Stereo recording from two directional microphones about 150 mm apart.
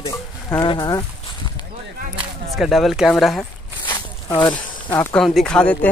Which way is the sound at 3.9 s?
30° left (ahead or behind).